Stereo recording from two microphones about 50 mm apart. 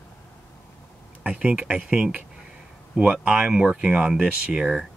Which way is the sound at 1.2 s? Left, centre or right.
Right.